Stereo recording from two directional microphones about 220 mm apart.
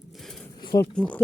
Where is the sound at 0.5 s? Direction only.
20° left (ahead or behind).